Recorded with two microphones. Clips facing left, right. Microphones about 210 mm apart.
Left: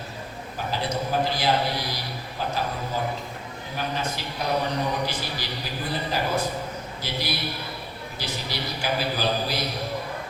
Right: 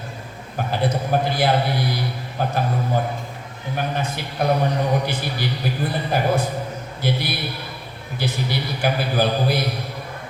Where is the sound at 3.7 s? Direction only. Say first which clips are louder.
Right 4 dB; 55° right (ahead or behind).